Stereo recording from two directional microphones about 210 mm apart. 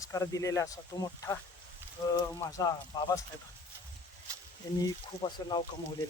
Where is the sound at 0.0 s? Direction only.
15° left (ahead or behind).